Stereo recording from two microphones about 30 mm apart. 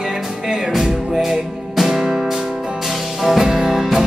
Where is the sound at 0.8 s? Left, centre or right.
Centre.